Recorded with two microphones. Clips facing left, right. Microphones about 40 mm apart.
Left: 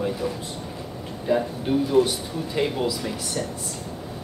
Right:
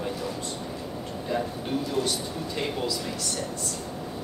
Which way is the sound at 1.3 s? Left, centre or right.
Centre.